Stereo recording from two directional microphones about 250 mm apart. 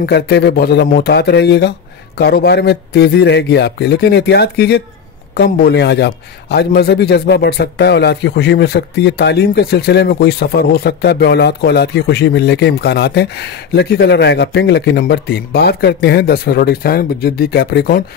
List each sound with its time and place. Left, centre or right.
0.0 s a man's voice: left